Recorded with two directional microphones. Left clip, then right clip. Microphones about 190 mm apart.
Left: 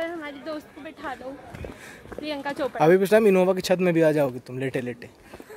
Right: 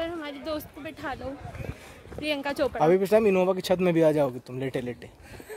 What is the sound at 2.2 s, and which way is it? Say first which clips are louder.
Speech: right 2 dB; 60° right (ahead or behind).